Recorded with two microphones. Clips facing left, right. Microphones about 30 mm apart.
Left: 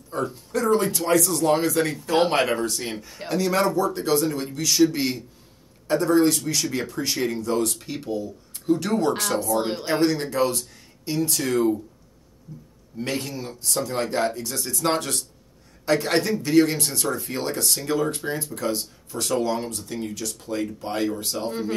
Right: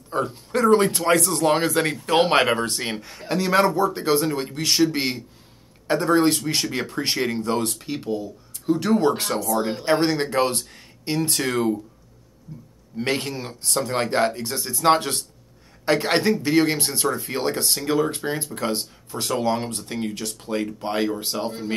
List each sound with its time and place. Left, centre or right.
0.1 s speech: right
3.3 s speech: right
7.8 s a man's voice: right
9.5 s speech: left
9.8 s speech: right
12.9 s speech: right
14.6 s a man's voice: centre
14.9 s a man's voice: right
17.7 s a man's voice: centre; by 18.9 s right
19.0 s a man's voice: right
19.5 s speech: right